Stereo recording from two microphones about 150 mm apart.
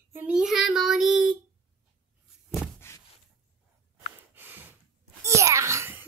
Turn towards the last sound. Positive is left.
turn(degrees=-15)  # may be behind; listen again after turning